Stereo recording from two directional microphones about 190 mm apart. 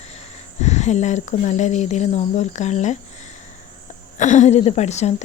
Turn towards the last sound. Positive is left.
turn(degrees=35)  # may be behind; listen again after turning